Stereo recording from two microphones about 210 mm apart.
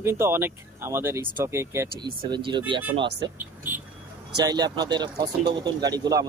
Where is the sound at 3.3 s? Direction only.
10° right (ahead or behind).